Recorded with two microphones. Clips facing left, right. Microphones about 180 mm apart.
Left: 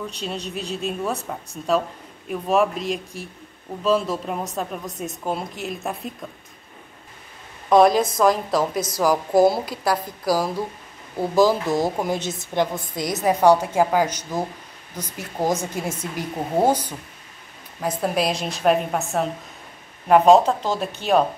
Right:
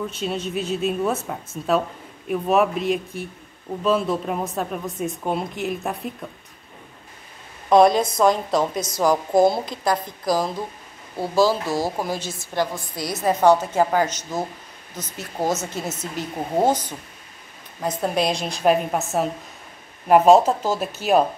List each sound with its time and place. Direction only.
0.0 s a woman's voice: centre (ahead or behind)
7.7 s a woman's voice: centre (ahead or behind)